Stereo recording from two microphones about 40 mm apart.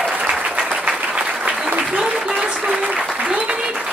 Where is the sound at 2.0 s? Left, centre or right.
Centre.